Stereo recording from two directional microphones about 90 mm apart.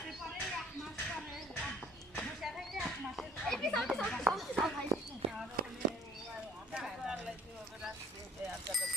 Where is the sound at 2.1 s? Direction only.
Centre (ahead or behind).